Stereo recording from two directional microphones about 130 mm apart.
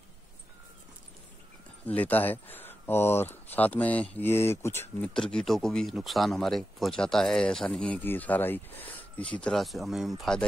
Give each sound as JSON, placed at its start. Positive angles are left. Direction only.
{"t": 1.9, "sound": "speech", "side_deg": 10}
{"t": 5.1, "sound": "speech", "side_deg": 5}